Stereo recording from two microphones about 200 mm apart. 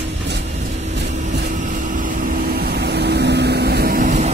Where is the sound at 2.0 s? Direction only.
45° right (ahead or behind).